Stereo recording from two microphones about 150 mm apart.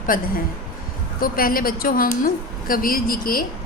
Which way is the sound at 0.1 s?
70° left (ahead or behind).